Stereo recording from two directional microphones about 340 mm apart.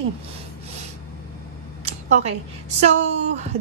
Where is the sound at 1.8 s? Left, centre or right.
Centre.